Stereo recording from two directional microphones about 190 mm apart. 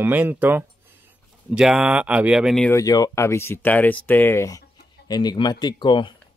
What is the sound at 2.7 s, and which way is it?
Speech, 20° left (ahead or behind).